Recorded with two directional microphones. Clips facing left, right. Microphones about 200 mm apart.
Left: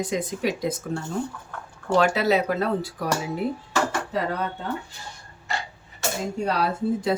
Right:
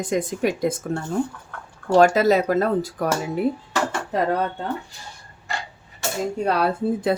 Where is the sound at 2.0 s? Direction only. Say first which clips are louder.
Right 5 dB; 40° right (ahead or behind).